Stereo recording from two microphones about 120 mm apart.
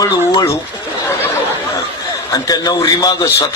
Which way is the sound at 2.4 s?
30° left (ahead or behind).